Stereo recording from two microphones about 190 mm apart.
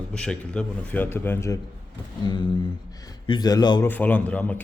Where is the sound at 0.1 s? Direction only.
5° left (ahead or behind).